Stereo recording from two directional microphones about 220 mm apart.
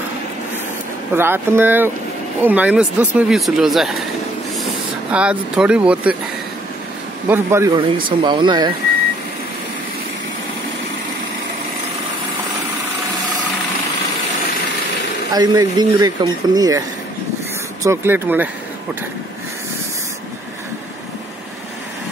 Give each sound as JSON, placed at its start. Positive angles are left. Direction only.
{"t": 1.1, "sound": "speech", "side_deg": -10}
{"t": 5.1, "sound": "speech", "side_deg": -5}
{"t": 7.2, "sound": "speech", "side_deg": -10}
{"t": 15.3, "sound": "speech", "side_deg": -20}
{"t": 17.8, "sound": "speech", "side_deg": -10}